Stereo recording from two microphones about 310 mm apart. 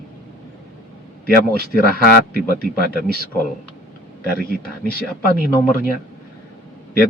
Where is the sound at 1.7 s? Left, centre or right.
Left.